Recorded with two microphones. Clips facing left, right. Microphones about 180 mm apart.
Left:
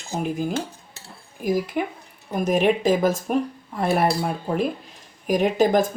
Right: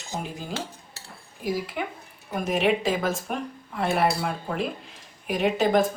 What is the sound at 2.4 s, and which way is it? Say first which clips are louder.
Speech: left 4 dB; 40° left (ahead or behind).